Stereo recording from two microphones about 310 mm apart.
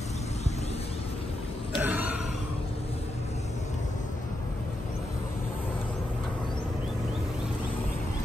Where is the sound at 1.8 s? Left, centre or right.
Centre.